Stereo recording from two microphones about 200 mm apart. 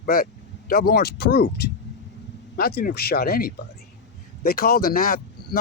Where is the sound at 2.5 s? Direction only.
50° left (ahead or behind).